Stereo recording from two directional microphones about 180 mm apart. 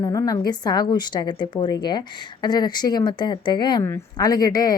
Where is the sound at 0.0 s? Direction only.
20° left (ahead or behind).